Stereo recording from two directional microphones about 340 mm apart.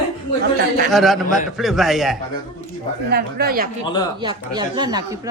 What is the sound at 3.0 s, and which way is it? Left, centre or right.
Speech, right.